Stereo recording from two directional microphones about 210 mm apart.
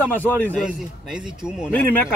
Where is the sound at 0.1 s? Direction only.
10° left (ahead or behind).